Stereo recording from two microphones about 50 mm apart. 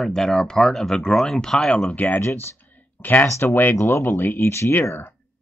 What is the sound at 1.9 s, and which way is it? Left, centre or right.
Speech, left.